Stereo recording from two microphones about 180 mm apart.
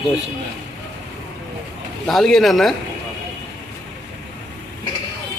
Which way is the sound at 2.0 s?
Centre (ahead or behind).